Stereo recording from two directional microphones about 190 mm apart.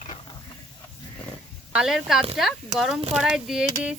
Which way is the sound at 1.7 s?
Centre (ahead or behind).